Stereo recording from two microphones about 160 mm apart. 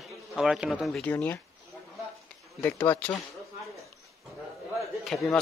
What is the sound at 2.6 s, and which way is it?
Speech, 10° left (ahead or behind).